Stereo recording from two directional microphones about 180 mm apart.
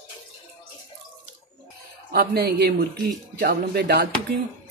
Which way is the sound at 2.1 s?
60° right (ahead or behind).